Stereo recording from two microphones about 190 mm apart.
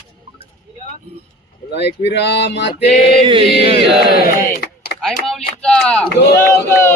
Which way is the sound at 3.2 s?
30° right (ahead or behind).